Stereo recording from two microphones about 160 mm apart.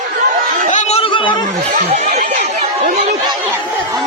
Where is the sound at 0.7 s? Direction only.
35° left (ahead or behind).